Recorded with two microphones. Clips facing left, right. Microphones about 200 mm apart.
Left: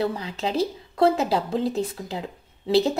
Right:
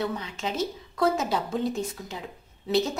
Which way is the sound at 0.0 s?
35° left (ahead or behind).